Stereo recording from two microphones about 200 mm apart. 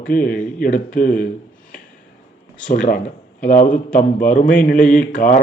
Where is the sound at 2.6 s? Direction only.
40° left (ahead or behind).